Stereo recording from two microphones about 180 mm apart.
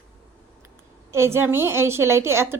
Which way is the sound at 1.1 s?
15° right (ahead or behind).